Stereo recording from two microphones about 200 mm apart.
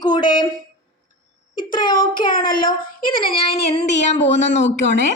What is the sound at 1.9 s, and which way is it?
Child singing, 45° left (ahead or behind).